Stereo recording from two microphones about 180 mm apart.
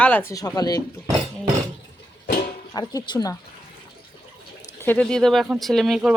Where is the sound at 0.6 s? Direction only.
20° left (ahead or behind).